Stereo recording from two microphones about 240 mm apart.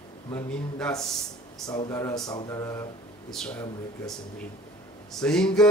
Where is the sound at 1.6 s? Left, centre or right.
Centre.